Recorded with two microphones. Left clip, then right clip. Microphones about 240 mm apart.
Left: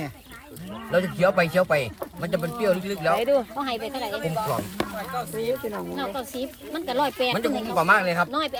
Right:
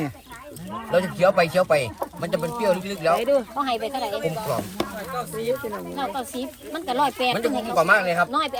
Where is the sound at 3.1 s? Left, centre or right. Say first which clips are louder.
Even; left.